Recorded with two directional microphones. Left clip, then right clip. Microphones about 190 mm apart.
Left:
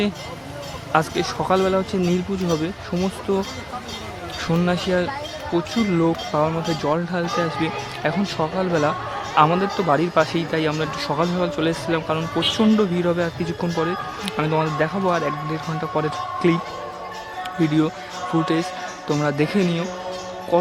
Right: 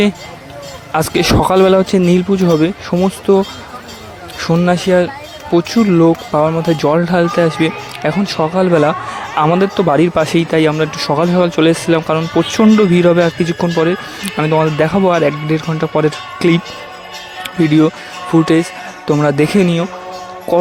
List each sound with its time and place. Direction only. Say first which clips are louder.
0.9 s a man's voice: right 8 dB; 45° right (ahead or behind)
19.0 s speech: right 9 dB; 40° right (ahead or behind)